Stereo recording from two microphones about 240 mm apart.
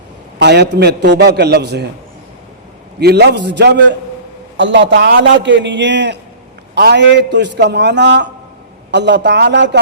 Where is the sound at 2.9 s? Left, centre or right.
Right.